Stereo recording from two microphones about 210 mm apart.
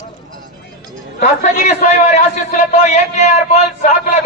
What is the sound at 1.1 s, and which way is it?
Speech, 35° left (ahead or behind).